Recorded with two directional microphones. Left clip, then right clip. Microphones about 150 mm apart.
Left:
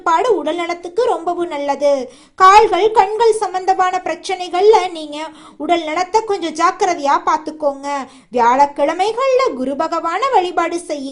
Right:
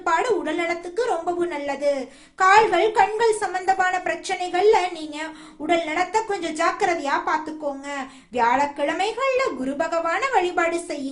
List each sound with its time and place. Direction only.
0.0 s speech: 30° left (ahead or behind)